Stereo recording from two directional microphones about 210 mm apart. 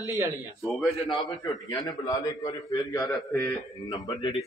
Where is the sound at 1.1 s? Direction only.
20° left (ahead or behind).